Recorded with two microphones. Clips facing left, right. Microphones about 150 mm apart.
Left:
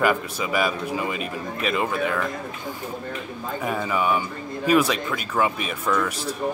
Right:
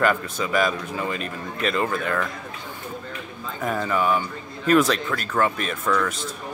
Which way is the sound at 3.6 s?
5° left (ahead or behind).